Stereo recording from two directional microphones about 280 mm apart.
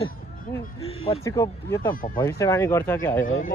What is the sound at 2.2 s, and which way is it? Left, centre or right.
Speech, centre.